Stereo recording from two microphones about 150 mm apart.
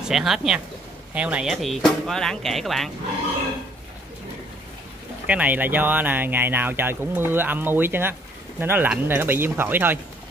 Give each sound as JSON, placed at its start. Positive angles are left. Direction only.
{"t": 0.0, "sound": "speech", "side_deg": 0}
{"t": 5.2, "sound": "speech", "side_deg": -10}